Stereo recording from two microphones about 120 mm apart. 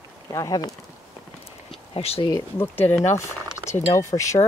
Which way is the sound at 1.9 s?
55° left (ahead or behind).